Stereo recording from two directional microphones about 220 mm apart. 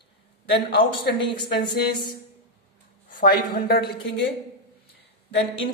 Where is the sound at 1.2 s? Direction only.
20° left (ahead or behind).